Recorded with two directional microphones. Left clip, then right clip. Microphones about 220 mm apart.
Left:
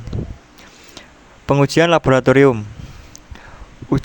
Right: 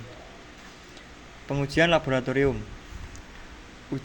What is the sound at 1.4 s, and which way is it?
Speech, 45° left (ahead or behind).